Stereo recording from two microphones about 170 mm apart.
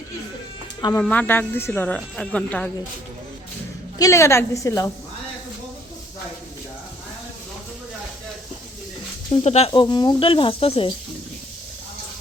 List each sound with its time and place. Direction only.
0.8 s speech: 25° left (ahead or behind)
1.0 s speech: 10° left (ahead or behind)
3.9 s speech: 20° left (ahead or behind)
9.3 s speech: 40° left (ahead or behind)
9.7 s speech: 25° left (ahead or behind)